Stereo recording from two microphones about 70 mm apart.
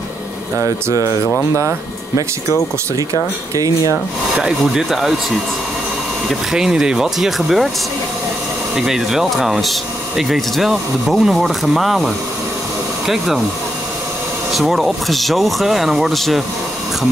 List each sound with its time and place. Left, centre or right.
0.6 s speech: right
3.5 s speech: right
4.4 s speech: centre
6.5 s speech: centre
8.7 s speech: centre
14.5 s speech: centre